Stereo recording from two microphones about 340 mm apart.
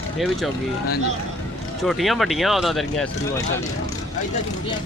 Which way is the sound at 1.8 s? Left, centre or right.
Centre.